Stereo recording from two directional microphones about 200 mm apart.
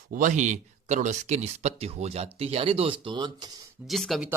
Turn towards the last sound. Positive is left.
turn(degrees=0)  # may be behind; listen again after turning